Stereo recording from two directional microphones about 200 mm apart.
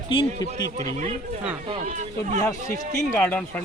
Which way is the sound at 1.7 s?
35° right (ahead or behind).